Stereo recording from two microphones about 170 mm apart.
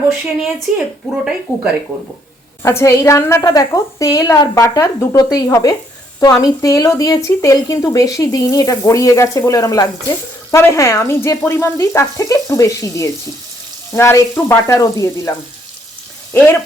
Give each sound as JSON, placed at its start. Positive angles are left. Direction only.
{"t": 0.7, "sound": "speech", "side_deg": 0}
{"t": 2.6, "sound": "speech", "side_deg": 15}
{"t": 13.9, "sound": "frying", "side_deg": 15}